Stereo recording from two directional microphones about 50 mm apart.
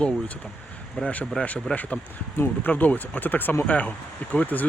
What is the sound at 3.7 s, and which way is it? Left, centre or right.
Speech, left.